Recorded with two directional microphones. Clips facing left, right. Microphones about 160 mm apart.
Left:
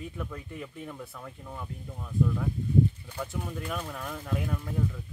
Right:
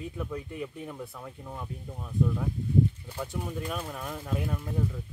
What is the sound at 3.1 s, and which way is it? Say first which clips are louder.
Speech: right 1 dB; 10° right (ahead or behind).